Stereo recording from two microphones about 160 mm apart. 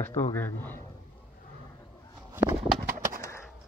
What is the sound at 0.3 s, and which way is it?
Speech, 15° left (ahead or behind).